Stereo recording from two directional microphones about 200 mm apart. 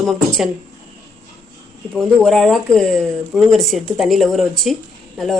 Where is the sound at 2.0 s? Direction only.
Centre (ahead or behind).